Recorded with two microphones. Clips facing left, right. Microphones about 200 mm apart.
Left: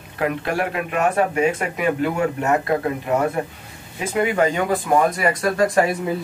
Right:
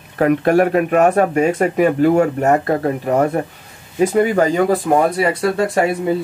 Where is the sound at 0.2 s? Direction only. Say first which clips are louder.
Right 9 dB; 45° right (ahead or behind); by 5.9 s 30° right (ahead or behind).